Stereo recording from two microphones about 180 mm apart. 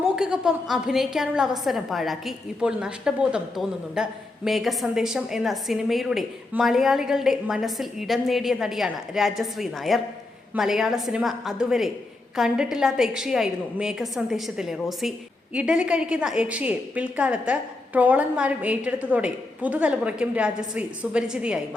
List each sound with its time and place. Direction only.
0.2 s a woman's voice: 5° right (ahead or behind)